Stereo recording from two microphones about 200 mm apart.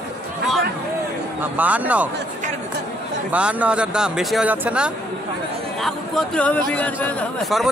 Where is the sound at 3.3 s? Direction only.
5° right (ahead or behind).